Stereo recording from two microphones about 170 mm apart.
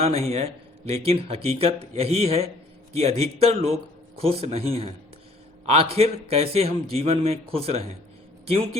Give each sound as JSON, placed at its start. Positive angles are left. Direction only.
{"t": 0.3, "sound": "speech", "side_deg": -35}